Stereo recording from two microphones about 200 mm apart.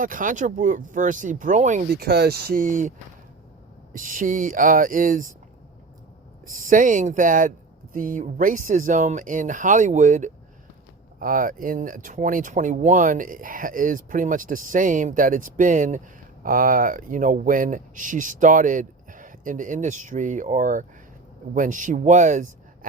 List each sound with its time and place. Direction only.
0.0 s speech: 45° right (ahead or behind)
1.9 s speech: 50° right (ahead or behind)
3.9 s speech: 40° right (ahead or behind)
6.4 s speech: 40° right (ahead or behind)